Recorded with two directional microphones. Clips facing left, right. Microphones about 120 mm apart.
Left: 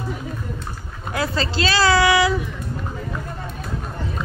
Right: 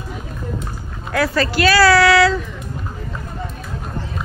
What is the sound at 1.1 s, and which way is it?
Speech, 25° left (ahead or behind).